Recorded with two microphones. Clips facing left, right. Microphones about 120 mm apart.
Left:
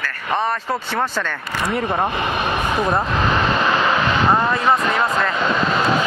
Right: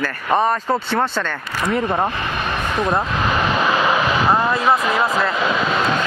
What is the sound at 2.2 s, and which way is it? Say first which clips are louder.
Speech: left 2 dB; 15° left (ahead or behind).